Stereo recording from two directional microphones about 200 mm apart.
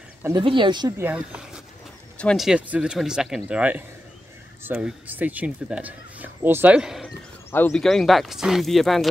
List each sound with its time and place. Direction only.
0.2 s speech: 20° right (ahead or behind); by 9.1 s centre (ahead or behind)